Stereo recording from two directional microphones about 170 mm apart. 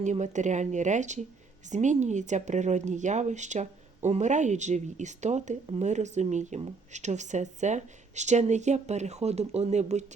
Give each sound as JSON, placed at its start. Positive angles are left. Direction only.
{"t": 0.0, "sound": "speech", "side_deg": -45}